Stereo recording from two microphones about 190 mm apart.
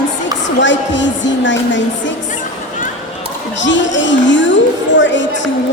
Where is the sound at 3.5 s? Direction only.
70° left (ahead or behind).